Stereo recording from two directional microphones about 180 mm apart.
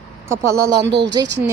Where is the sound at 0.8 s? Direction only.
75° right (ahead or behind).